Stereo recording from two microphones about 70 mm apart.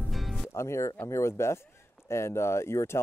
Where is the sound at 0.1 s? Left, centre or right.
Centre.